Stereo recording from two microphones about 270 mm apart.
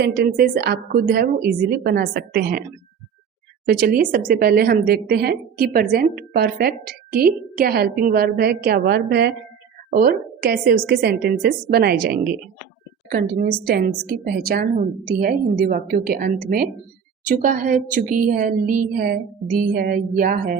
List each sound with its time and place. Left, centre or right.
0.0 s a woman's voice: right
3.7 s a woman's voice: right